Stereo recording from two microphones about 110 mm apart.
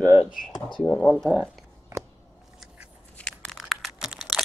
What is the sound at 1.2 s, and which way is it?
Speech, 5° left (ahead or behind).